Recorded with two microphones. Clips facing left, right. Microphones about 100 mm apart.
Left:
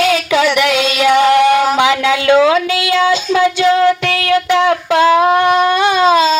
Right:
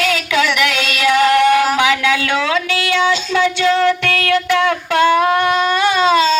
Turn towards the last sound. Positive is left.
turn(degrees=15)  # may be behind; listen again after turning